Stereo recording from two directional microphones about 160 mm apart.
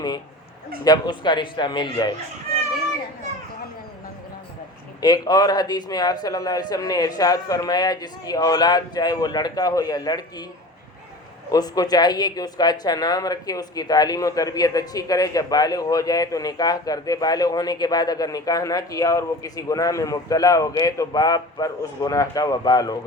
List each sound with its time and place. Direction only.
0.9 s speech: 30° left (ahead or behind)
5.0 s speech: 25° left (ahead or behind)
11.5 s speech: 25° left (ahead or behind)